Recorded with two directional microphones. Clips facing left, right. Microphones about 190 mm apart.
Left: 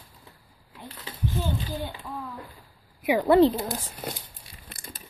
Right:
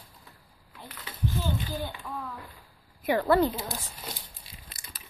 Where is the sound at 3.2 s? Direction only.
20° left (ahead or behind).